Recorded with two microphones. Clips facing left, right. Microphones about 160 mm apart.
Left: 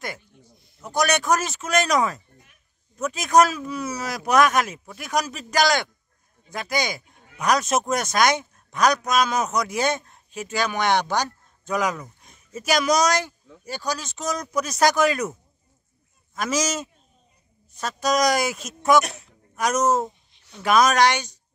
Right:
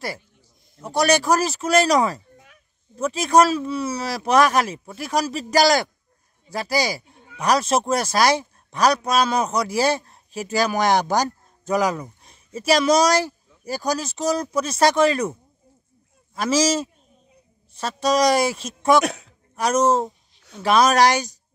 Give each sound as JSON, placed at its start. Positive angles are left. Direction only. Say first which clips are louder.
{"t": 0.8, "sound": "speech", "louder": "right 3 dB", "side_deg": -30}
{"t": 16.3, "sound": "speech", "louder": "right 5 dB", "side_deg": -30}
{"t": 19.0, "sound": "a man's voice", "louder": "right 10 dB", "side_deg": -90}
{"t": 19.5, "sound": "speech", "louder": "right 2 dB", "side_deg": -30}